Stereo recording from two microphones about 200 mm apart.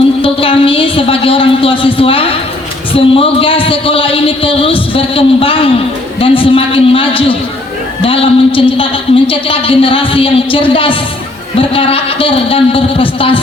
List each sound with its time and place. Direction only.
0.2 s a woman's voice: 25° left (ahead or behind)